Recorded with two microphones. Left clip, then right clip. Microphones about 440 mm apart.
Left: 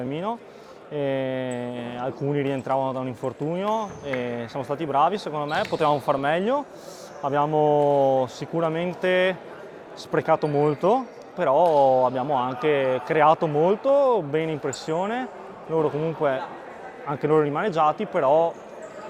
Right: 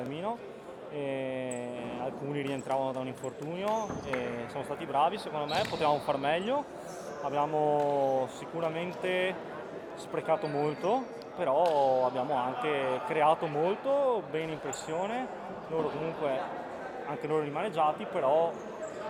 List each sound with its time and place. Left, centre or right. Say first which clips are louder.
0.1 s speech: left 6 dB; left
17.2 s speech: left 11 dB; left